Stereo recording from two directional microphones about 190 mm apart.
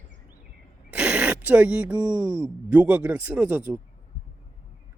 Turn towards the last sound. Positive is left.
turn(degrees=-10)  # may be behind; listen again after turning